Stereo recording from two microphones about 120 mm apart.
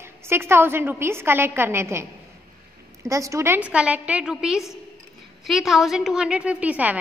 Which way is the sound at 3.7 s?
10° right (ahead or behind).